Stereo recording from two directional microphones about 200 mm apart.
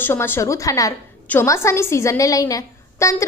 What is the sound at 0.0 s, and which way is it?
A woman's voice, 10° left (ahead or behind).